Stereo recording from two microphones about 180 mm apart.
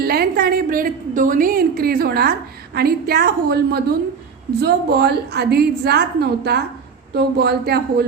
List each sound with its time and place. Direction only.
0.0 s a woman's voice: 60° right (ahead or behind)